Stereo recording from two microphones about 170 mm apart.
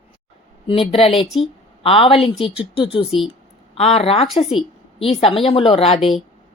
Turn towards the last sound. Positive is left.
turn(degrees=0)  # may be behind; listen again after turning